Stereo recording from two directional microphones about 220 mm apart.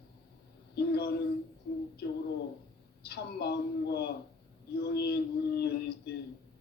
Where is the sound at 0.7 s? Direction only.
45° left (ahead or behind).